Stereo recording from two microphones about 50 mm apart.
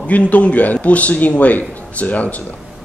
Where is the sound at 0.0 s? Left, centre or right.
Left.